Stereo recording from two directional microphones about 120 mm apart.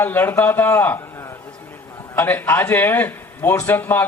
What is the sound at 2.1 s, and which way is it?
Speech, 15° left (ahead or behind).